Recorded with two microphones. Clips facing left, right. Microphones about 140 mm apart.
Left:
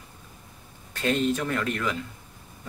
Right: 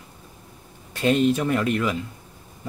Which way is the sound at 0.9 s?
15° right (ahead or behind).